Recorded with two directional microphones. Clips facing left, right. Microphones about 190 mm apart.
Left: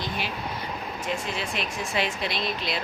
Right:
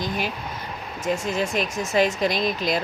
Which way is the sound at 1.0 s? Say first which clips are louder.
Right 8 dB; 45° right (ahead or behind).